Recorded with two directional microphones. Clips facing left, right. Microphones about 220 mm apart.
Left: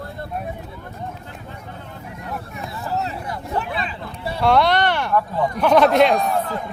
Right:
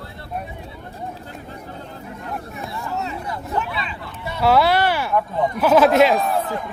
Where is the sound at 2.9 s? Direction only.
35° left (ahead or behind).